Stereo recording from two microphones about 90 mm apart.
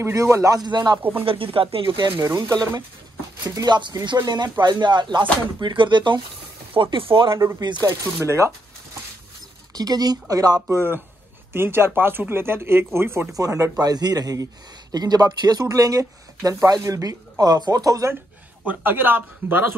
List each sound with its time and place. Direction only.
0.0 s speech: 30° right (ahead or behind)
0.6 s a man's voice: 55° right (ahead or behind)
1.1 s speech: 80° right
2.0 s speech: 60° right (ahead or behind)
2.2 s a man's voice: 45° right (ahead or behind)
6.7 s speech: 75° right (ahead or behind)
7.8 s speech: 30° right (ahead or behind)
9.8 s a man's voice: 45° right (ahead or behind)
10.7 s speech: 25° right (ahead or behind)
13.4 s a man's voice: 40° right (ahead or behind)
18.7 s speech: 20° right (ahead or behind)